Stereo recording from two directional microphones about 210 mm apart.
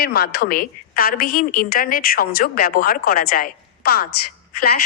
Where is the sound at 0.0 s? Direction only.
45° left (ahead or behind).